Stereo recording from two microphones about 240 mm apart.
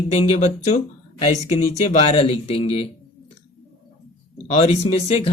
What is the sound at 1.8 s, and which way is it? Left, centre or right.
Speech, left.